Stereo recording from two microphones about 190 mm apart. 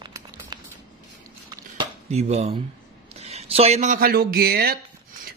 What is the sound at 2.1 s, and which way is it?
A man's voice, 35° right (ahead or behind).